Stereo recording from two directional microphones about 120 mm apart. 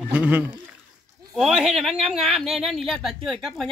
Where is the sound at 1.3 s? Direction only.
Centre (ahead or behind).